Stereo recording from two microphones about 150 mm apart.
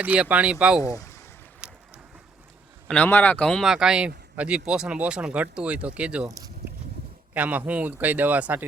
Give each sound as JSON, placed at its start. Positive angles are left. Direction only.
{"t": 0.0, "sound": "speech", "side_deg": -10}
{"t": 0.8, "sound": "speech", "side_deg": 20}
{"t": 1.6, "sound": "boat", "side_deg": -5}
{"t": 2.8, "sound": "speech", "side_deg": 10}
{"t": 6.2, "sound": "a sound", "side_deg": -20}
{"t": 7.3, "sound": "speech", "side_deg": -10}